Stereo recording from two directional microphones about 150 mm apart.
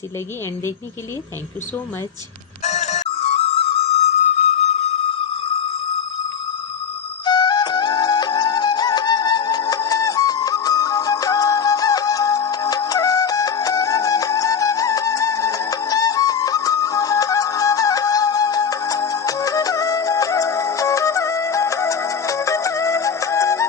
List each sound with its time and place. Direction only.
2.6 s music: 50° left (ahead or behind)
7.3 s music: 30° left (ahead or behind)